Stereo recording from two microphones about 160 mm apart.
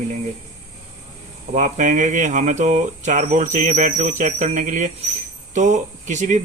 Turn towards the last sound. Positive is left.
turn(degrees=-50)  # may be behind; listen again after turning